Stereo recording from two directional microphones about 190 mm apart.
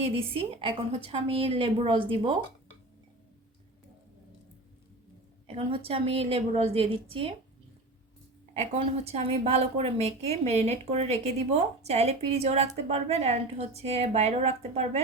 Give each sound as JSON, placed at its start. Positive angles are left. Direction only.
{"t": 0.0, "sound": "a woman's voice", "side_deg": -30}
{"t": 5.5, "sound": "a woman's voice", "side_deg": -30}
{"t": 8.5, "sound": "a woman's voice", "side_deg": -35}